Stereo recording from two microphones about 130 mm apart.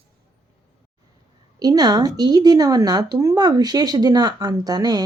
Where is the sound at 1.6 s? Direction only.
30° right (ahead or behind).